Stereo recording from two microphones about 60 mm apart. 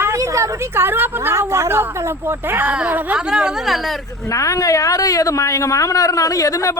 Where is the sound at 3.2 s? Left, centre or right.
Centre.